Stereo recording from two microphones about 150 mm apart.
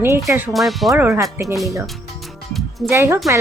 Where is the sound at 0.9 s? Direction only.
15° right (ahead or behind).